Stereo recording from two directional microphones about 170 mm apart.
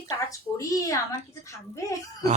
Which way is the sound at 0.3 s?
20° left (ahead or behind).